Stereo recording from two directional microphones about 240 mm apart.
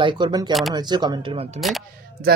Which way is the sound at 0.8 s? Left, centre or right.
Centre.